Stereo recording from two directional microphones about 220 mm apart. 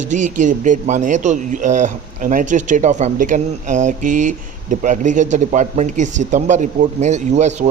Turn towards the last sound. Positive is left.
turn(degrees=-30)  # may be behind; listen again after turning